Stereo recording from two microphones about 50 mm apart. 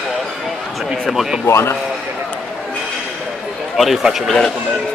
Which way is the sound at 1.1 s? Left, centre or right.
Centre.